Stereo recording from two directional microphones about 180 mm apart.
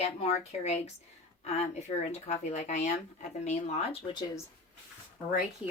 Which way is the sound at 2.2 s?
40° left (ahead or behind).